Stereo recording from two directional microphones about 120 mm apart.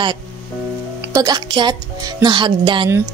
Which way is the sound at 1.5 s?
40° right (ahead or behind).